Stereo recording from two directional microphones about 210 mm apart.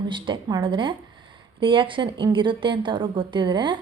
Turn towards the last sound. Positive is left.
turn(degrees=-20)  # may be behind; listen again after turning